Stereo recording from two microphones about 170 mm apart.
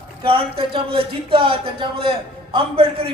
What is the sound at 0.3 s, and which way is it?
Speech, 30° right (ahead or behind).